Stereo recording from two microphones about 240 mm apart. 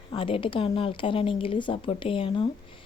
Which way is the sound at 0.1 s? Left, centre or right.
Left.